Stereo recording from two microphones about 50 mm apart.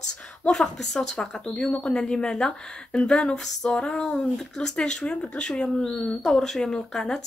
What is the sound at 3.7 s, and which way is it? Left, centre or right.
Speech, centre.